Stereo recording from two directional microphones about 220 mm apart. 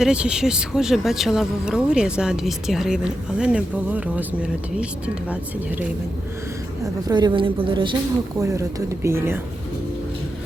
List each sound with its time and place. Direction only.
0.0 s speech: 5° right (ahead or behind)
7.1 s a woman's voice: 20° right (ahead or behind)